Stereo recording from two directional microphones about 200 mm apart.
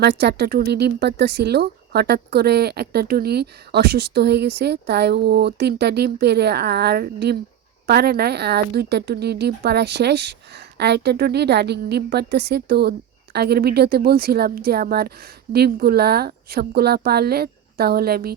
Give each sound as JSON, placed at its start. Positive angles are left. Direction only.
{"t": 0.0, "sound": "a woman's voice", "side_deg": -55}